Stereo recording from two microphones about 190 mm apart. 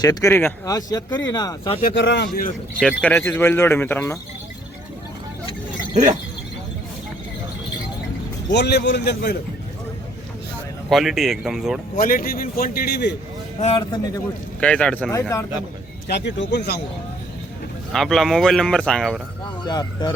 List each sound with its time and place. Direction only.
0.0 s speech: 20° left (ahead or behind)
2.0 s a man's voice: 65° left (ahead or behind)
2.8 s speech: 10° left (ahead or behind)
8.4 s a man's voice: 60° left (ahead or behind)
10.8 s speech: centre (ahead or behind)
11.9 s a man's voice: 50° left (ahead or behind)
13.6 s speech: 30° left (ahead or behind)
14.6 s speech: 5° left (ahead or behind)
15.1 s speech: 15° left (ahead or behind)
16.0 s a man's voice: 65° left (ahead or behind)
17.9 s speech: centre (ahead or behind)
19.6 s speech: 20° left (ahead or behind)